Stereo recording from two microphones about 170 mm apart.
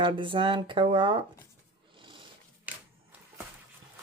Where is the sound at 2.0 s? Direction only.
30° right (ahead or behind).